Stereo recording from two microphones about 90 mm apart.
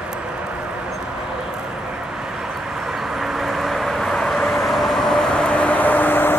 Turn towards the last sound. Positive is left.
turn(degrees=20)  # may be behind; listen again after turning